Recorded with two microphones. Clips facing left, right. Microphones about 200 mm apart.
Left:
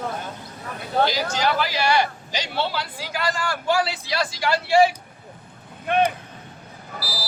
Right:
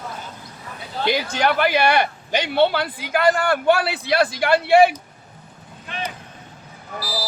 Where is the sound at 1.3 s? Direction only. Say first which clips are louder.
Right 4 dB; 60° right (ahead or behind).